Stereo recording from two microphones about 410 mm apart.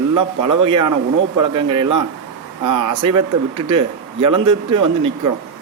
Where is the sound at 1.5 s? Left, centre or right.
Centre.